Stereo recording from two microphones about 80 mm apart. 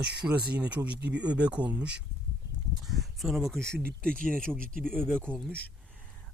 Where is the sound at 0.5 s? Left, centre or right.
Centre.